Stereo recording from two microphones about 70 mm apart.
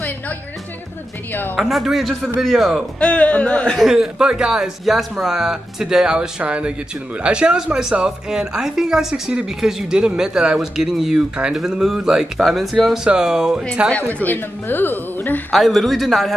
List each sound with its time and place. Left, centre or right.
1.6 s a man's voice: centre
3.0 s speech: centre
3.8 s speech: centre
13.9 s a woman's voice: left
15.5 s a man's voice: centre